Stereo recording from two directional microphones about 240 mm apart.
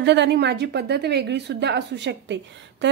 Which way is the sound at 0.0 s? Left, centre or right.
Right.